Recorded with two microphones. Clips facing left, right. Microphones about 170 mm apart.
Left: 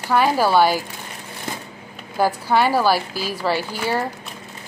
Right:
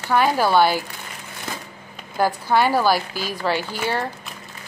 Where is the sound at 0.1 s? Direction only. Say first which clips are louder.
Left 1 dB; 5° left (ahead or behind).